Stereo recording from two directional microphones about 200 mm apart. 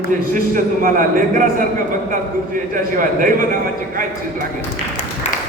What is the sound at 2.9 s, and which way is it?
Speech, 45° right (ahead or behind).